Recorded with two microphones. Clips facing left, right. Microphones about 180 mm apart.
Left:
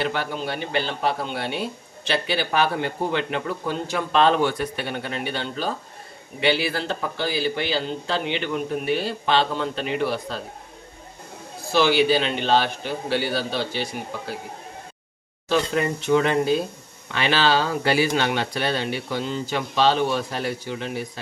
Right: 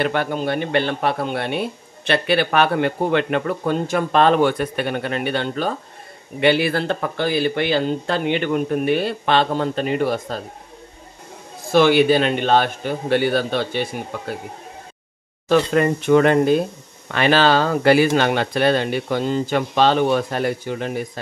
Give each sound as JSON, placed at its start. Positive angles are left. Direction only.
{"t": 0.0, "sound": "a man's voice", "side_deg": -55}
{"t": 11.7, "sound": "speech", "side_deg": -50}
{"t": 15.4, "sound": "a man's voice", "side_deg": -55}